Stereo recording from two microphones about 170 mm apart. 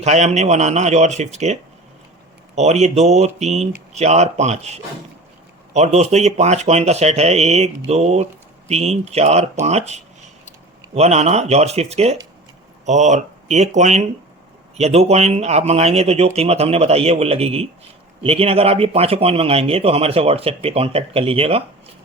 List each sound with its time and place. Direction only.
0.0 s speech: 40° right (ahead or behind)
2.6 s speech: 40° right (ahead or behind)